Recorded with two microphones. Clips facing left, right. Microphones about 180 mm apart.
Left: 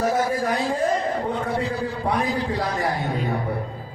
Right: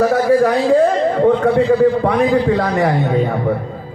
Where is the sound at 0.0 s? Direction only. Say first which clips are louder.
Right 10 dB; 70° right (ahead or behind).